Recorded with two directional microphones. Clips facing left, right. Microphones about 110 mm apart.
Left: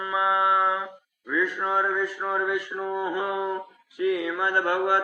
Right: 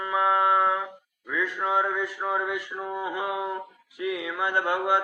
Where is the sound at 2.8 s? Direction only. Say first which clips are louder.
Left 1 dB; 5° right (ahead or behind).